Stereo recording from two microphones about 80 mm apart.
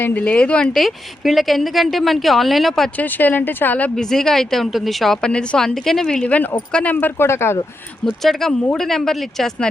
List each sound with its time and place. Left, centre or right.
0.0 s speech: left
0.7 s a woman's voice: centre
3.0 s speech: left
3.9 s a woman's voice: centre
6.2 s speech: centre
7.2 s speech: left
8.2 s a woman's voice: centre